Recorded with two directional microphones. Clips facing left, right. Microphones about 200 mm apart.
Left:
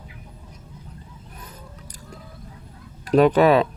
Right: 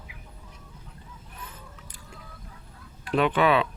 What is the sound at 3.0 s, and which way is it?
Speech, 40° left (ahead or behind).